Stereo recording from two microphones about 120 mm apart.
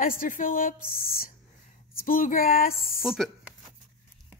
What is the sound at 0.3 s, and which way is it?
Speech, 90° left.